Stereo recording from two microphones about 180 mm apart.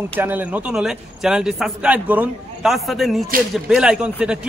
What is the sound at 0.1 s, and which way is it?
A man's voice, 10° right (ahead or behind).